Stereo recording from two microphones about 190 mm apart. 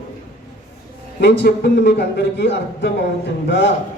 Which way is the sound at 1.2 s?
65° left (ahead or behind).